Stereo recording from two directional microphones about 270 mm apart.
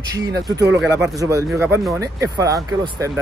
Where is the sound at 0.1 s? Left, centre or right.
Centre.